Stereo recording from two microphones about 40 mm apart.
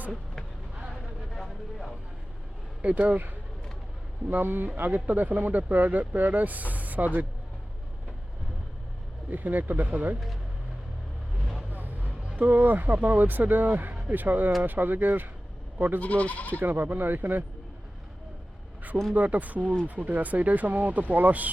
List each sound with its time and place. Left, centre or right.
2.8 s speech: right
4.9 s speech: right
9.3 s speech: right
11.7 s music: right
12.5 s speech: right
16.0 s speech: left
16.6 s speech: right
19.1 s speech: right